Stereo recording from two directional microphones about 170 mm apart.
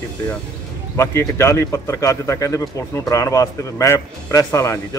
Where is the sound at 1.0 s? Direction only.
15° left (ahead or behind).